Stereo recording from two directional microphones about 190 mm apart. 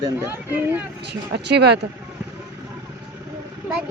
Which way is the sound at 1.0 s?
60° right (ahead or behind).